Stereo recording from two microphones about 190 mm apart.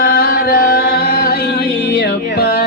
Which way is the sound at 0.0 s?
50° left (ahead or behind).